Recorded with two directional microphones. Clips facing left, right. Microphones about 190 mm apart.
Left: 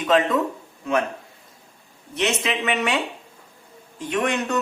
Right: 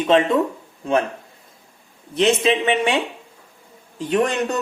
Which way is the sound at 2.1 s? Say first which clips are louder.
Right 7 dB; 30° right (ahead or behind).